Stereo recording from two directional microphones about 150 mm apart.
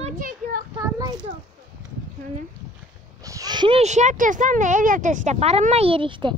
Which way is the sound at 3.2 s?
25° right (ahead or behind).